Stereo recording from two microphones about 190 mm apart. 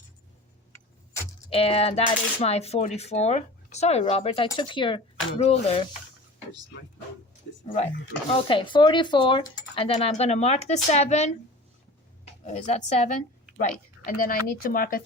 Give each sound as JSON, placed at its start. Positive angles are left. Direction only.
{"t": 1.5, "sound": "speech", "side_deg": 30}
{"t": 8.3, "sound": "a woman's voice", "side_deg": 30}